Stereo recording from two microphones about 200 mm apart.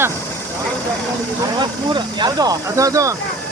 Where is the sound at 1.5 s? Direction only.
20° right (ahead or behind).